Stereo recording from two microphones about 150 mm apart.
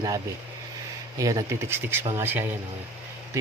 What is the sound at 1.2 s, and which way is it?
Speech, 25° right (ahead or behind).